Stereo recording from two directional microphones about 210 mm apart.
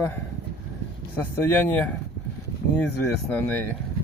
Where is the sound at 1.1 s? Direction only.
10° left (ahead or behind).